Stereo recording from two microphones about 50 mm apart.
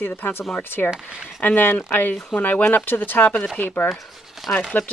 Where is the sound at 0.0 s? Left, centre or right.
Left.